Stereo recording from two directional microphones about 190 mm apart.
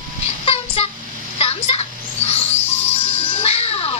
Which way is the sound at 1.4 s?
30° left (ahead or behind).